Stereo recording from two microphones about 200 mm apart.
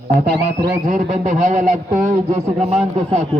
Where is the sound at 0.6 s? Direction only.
40° right (ahead or behind).